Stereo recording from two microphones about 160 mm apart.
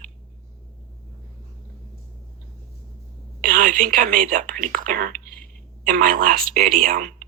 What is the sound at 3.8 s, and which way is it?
Speech, 55° right (ahead or behind).